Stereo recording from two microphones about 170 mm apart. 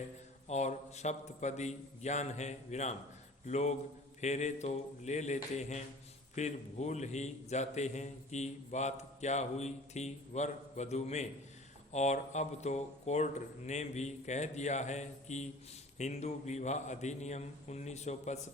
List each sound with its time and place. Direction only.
0.4 s a man's voice: 40° left (ahead or behind)